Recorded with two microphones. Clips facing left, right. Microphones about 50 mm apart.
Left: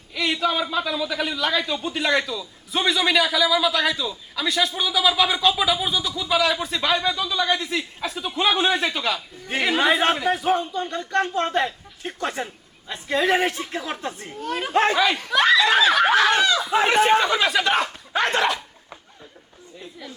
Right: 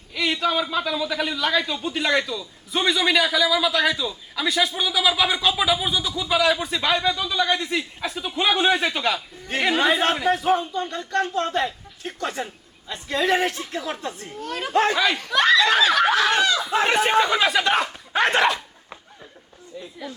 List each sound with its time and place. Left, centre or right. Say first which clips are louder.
0.1 s speech: even; centre
11.1 s speech: left 1 dB; left
14.3 s speech: left 3 dB; centre
14.7 s speech: even; left
14.9 s speech: left 1 dB; centre